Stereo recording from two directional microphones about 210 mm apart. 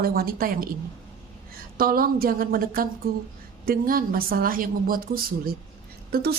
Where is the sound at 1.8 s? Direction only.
45° right (ahead or behind).